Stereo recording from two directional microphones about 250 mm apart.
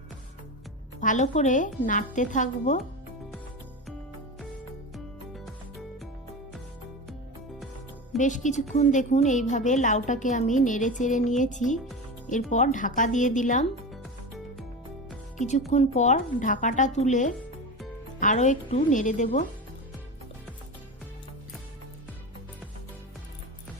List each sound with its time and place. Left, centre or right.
1.0 s a woman's voice: left
8.2 s a woman's voice: left
15.4 s a woman's voice: left